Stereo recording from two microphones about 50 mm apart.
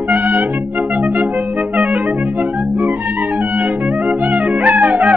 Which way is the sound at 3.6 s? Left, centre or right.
Right.